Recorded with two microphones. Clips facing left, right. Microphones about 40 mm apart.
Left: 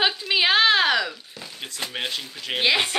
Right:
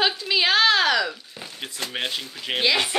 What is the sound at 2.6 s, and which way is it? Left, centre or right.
Speech, centre.